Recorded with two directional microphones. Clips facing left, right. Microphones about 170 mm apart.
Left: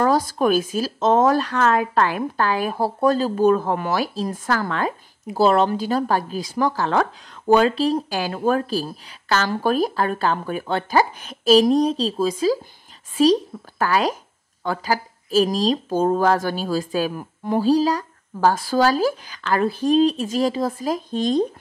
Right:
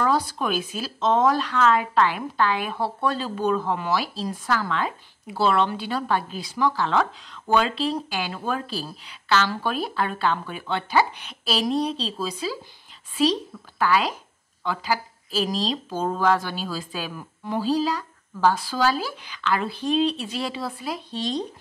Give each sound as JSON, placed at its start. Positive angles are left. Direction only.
{"t": 0.0, "sound": "speech", "side_deg": 45}